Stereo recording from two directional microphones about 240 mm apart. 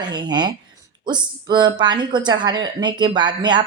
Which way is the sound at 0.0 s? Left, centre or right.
Centre.